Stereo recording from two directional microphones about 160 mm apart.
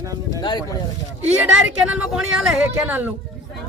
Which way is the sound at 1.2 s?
5° right (ahead or behind).